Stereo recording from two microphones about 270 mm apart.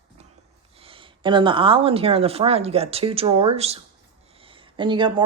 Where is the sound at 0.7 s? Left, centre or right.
Centre.